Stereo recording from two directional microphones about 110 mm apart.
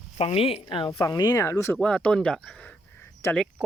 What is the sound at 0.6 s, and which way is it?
Speech, 50° left (ahead or behind).